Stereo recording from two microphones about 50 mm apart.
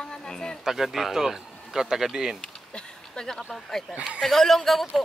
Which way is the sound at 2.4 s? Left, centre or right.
Centre.